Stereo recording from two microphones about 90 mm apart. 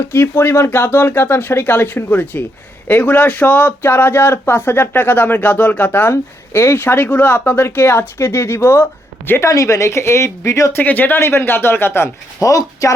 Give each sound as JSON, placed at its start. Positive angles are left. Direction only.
{"t": 0.0, "sound": "speech", "side_deg": 25}
{"t": 9.5, "sound": "speech", "side_deg": 35}
{"t": 12.4, "sound": "speech", "side_deg": 40}